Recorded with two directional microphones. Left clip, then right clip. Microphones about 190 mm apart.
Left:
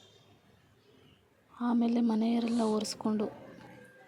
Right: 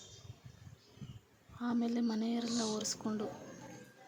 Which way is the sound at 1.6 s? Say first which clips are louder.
Left 6 dB; 25° left (ahead or behind).